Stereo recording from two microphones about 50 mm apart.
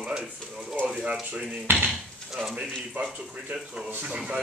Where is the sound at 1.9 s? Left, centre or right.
Centre.